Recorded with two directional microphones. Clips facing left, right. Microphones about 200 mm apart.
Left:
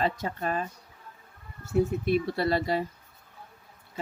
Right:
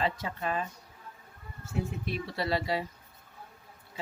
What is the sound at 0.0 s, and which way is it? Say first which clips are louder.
Speech: left 3 dB; 45° left (ahead or behind).